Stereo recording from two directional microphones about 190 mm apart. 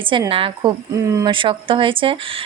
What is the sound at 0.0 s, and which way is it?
Speech, 25° right (ahead or behind).